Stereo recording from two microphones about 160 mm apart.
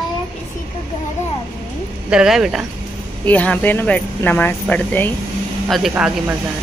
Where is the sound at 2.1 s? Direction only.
5° right (ahead or behind).